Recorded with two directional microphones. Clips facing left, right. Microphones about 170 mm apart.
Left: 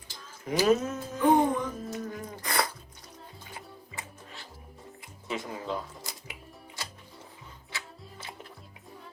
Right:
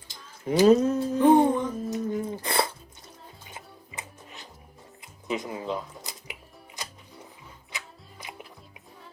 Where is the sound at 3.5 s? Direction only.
20° right (ahead or behind).